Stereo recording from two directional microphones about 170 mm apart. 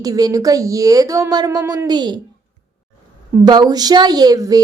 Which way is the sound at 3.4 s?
25° right (ahead or behind).